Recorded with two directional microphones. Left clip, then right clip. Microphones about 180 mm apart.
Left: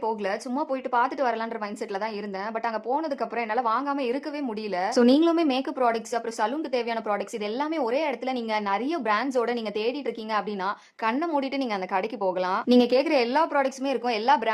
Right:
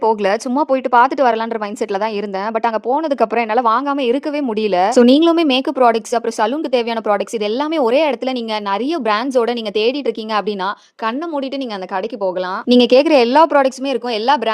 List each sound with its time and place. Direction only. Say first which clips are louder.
0.0 s speech: right 13 dB; 55° right (ahead or behind)
2.6 s speech: right 10 dB; 45° right (ahead or behind)
12.2 s speech: right 7 dB; 35° right (ahead or behind)